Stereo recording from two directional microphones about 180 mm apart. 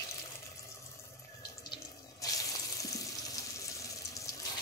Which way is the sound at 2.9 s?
20° left (ahead or behind).